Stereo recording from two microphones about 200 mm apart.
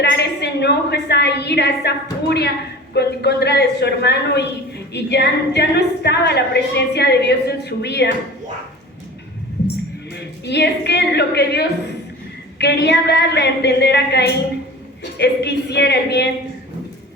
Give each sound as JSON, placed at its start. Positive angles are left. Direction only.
{"t": 0.0, "sound": "a woman's voice", "side_deg": 55}
{"t": 10.4, "sound": "a woman's voice", "side_deg": 55}